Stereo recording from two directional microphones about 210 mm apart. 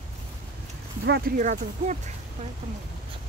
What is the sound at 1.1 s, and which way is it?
Speech, 40° right (ahead or behind).